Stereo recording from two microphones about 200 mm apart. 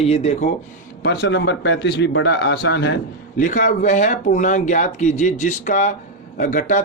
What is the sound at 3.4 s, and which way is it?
Speech, 40° left (ahead or behind).